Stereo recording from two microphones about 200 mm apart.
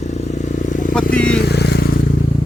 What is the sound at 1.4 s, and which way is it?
Vehicle, 55° left (ahead or behind).